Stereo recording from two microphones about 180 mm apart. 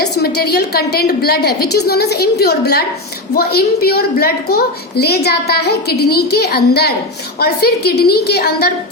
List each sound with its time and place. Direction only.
0.0 s a woman's voice: 65° left (ahead or behind)